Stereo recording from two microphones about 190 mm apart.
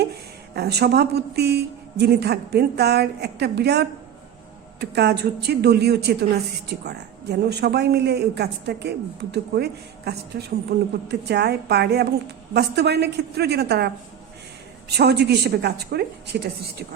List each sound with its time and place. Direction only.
0.5 s a woman's voice: 60° right (ahead or behind)